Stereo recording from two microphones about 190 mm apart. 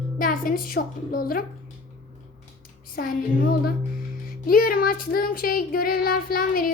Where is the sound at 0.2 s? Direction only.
45° left (ahead or behind).